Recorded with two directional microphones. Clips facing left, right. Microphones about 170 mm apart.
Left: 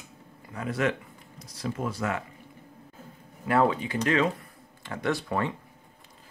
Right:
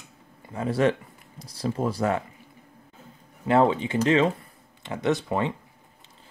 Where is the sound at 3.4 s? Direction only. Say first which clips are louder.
Right 3 dB; 25° right (ahead or behind).